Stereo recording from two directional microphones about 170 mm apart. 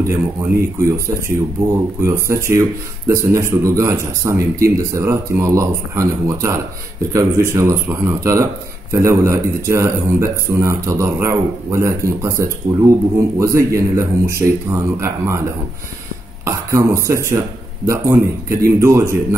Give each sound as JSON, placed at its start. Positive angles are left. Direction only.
{"t": 0.0, "sound": "speech", "side_deg": -15}
{"t": 16.4, "sound": "speech", "side_deg": -15}